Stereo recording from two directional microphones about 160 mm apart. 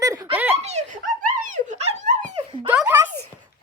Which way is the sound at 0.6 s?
45° right (ahead or behind).